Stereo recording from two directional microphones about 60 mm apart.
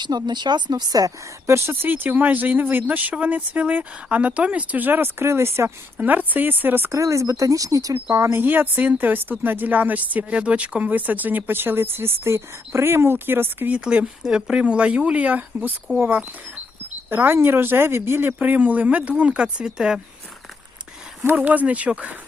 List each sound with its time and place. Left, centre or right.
0.9 s a woman's voice: right
1.5 s speech: right
6.1 s a woman's voice: right
6.9 s speech: right
8.1 s speech: right
8.4 s a woman's voice: right
13.7 s speech: centre
17.1 s a woman's voice: right
18.3 s speech: right
21.2 s speech: right